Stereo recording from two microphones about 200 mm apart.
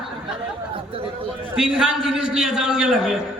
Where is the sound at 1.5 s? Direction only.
5° right (ahead or behind).